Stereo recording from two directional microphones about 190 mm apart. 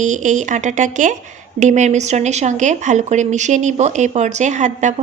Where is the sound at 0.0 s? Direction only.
40° right (ahead or behind).